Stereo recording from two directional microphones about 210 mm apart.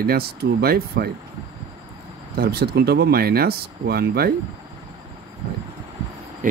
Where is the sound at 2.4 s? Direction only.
50° right (ahead or behind).